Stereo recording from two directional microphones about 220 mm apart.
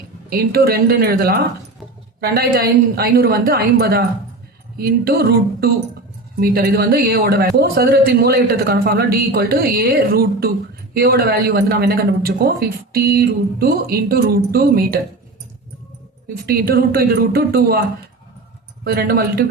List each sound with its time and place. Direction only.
0.3 s a man's voice: 45° right (ahead or behind)
16.5 s a man's voice: 45° right (ahead or behind)
18.9 s a man's voice: 45° right (ahead or behind)